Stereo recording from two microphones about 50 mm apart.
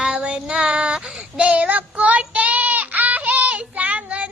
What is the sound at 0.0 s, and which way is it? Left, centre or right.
Child singing, centre.